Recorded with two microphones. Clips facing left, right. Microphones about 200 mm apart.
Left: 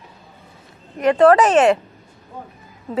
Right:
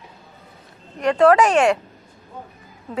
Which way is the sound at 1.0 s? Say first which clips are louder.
Left 2 dB; centre (ahead or behind).